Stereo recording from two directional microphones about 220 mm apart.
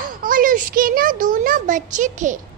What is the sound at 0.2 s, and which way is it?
A child's voice, 40° right (ahead or behind).